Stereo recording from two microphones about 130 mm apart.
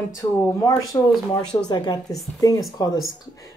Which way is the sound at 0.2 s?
25° left (ahead or behind).